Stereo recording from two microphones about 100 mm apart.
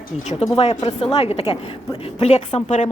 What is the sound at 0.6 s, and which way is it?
A woman's voice, 80° left.